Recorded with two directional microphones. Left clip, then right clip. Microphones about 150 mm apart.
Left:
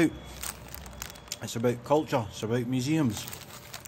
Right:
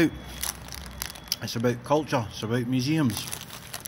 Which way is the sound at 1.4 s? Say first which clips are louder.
Even; 20° left (ahead or behind).